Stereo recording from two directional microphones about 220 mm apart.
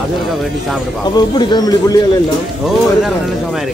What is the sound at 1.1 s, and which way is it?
Speech, 20° left (ahead or behind).